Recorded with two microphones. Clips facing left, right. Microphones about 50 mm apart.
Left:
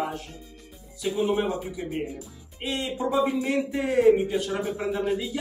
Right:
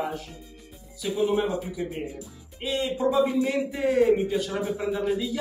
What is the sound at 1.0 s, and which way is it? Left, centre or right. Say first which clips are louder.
A man's voice: even; centre.